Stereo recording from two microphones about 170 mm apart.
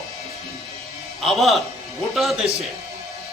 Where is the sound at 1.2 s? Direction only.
Centre (ahead or behind).